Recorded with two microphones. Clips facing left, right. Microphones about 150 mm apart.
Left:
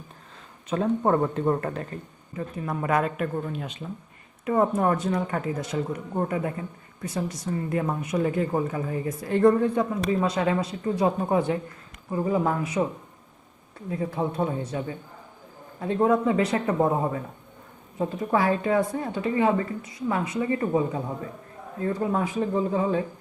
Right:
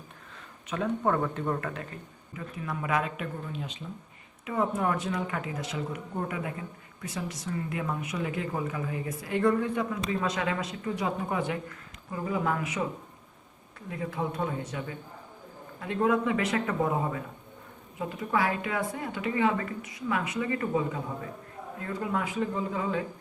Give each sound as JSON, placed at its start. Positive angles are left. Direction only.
{"t": 0.7, "sound": "a man's voice", "side_deg": 30}
{"t": 13.9, "sound": "a man's voice", "side_deg": 35}